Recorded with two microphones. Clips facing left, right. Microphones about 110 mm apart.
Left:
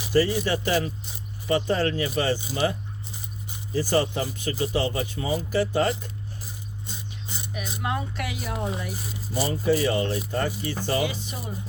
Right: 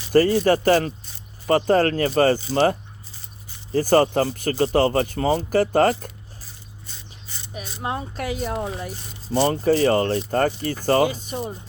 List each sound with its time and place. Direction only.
0.1 s speech: 50° right (ahead or behind)
3.7 s speech: 50° right (ahead or behind)
6.8 s a sound: 15° left (ahead or behind)
7.8 s speech: 30° right (ahead or behind)